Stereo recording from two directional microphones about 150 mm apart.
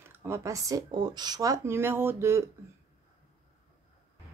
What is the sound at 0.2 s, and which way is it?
A child's voice, 20° right (ahead or behind).